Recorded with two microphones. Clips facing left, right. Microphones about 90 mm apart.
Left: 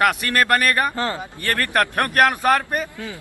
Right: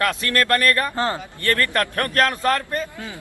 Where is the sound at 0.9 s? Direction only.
30° right (ahead or behind).